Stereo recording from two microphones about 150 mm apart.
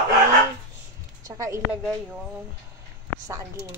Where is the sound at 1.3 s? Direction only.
20° right (ahead or behind).